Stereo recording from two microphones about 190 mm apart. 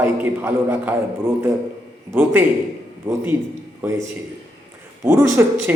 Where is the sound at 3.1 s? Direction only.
15° right (ahead or behind).